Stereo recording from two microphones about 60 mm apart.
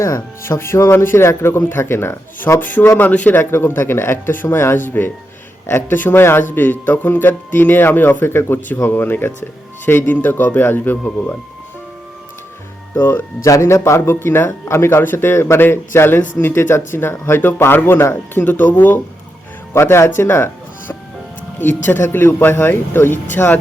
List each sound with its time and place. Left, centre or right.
0.0 s speech: left
2.6 s a man's voice: left
3.3 s speech: left
13.0 s speech: left
13.4 s speech: left
14.1 s speech: left
19.7 s speech: left